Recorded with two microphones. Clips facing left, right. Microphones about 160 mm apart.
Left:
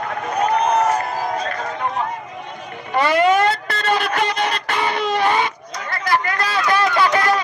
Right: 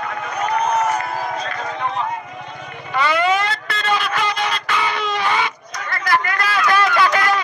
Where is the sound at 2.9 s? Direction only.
45° left (ahead or behind).